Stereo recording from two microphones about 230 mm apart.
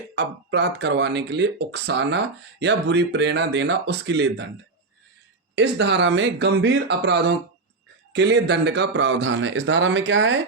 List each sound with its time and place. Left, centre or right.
0.2 s speech: right
5.5 s speech: right